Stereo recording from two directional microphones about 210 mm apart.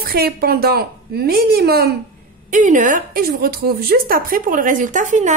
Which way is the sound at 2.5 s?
35° right (ahead or behind).